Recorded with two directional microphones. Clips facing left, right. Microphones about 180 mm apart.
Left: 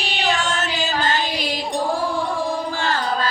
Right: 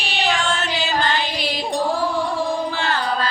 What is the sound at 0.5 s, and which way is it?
Music, 45° left (ahead or behind).